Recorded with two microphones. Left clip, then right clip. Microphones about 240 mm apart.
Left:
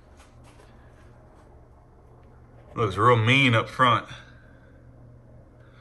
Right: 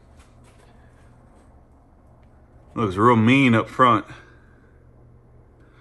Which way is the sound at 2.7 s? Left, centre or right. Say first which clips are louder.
Right 2 dB; centre.